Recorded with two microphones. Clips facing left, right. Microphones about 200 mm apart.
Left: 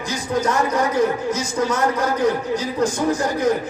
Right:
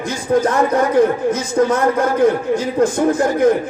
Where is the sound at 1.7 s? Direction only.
55° right (ahead or behind).